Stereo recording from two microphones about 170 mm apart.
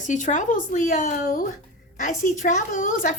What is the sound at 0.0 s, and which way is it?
Speech, 45° left (ahead or behind).